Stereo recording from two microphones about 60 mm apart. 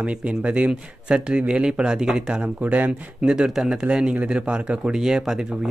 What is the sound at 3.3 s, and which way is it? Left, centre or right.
Speech, centre.